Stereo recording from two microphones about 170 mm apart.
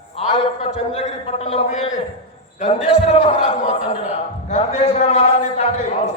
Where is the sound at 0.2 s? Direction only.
35° left (ahead or behind).